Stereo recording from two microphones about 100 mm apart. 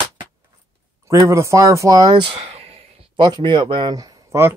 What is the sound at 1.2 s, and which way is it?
Speech, 30° right (ahead or behind).